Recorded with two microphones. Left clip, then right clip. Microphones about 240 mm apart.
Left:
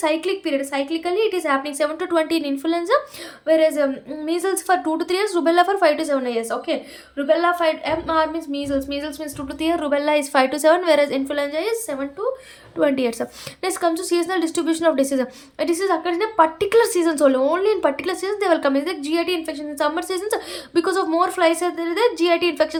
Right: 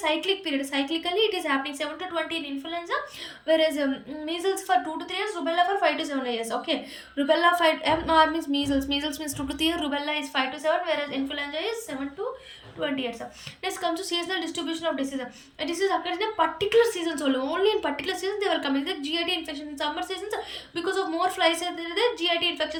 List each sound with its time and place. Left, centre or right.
0.0 s speech: centre